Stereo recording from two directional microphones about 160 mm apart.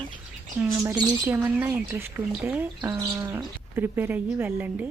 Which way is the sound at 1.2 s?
10° right (ahead or behind).